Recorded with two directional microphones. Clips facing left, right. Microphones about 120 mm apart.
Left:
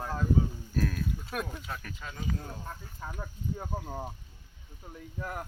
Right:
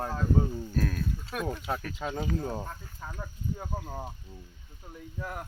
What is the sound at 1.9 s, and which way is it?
Speech, 75° right (ahead or behind).